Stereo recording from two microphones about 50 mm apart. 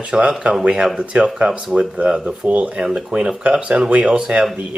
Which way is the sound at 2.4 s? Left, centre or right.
Right.